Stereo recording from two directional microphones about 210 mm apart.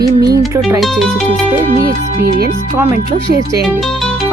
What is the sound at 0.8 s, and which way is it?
Speech, centre (ahead or behind).